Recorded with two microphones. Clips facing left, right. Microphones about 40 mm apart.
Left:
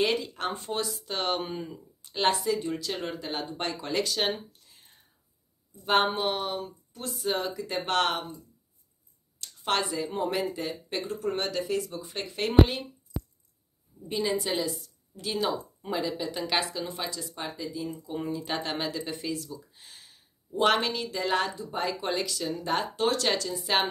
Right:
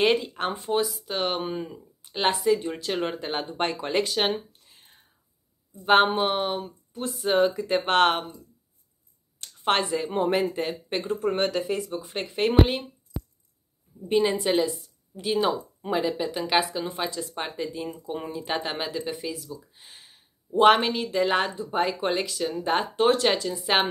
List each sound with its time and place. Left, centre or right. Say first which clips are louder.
0.0 s speech: right 5 dB; right
0.5 s speech: right 7 dB; centre
2.6 s speech: right 4 dB; right
9.4 s speech: right 4 dB; right
14.0 s speech: right 6 dB; right
17.3 s speech: right 4 dB; right
18.4 s speech: right 2 dB; centre